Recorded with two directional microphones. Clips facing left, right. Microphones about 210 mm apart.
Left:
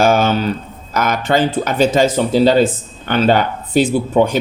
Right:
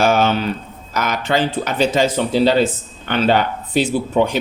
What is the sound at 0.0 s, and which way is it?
Speech, 45° left (ahead or behind).